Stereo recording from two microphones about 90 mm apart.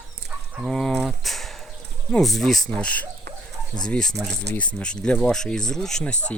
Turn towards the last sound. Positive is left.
turn(degrees=5)  # may be behind; listen again after turning